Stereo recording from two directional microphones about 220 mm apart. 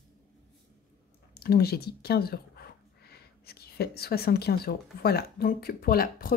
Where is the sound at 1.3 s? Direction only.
45° left (ahead or behind).